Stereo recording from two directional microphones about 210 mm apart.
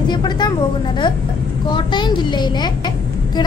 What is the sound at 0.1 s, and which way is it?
Speech, 20° left (ahead or behind).